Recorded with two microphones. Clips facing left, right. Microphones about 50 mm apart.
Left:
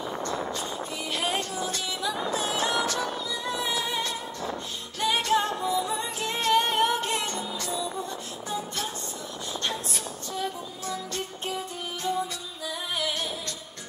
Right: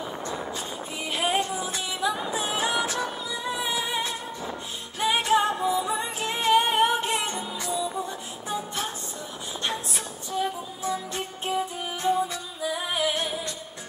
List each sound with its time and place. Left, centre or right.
1.1 s music: centre